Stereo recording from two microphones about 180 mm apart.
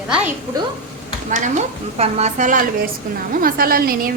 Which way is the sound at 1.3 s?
40° right (ahead or behind).